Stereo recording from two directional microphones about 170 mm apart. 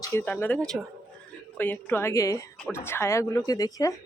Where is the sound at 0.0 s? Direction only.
15° left (ahead or behind).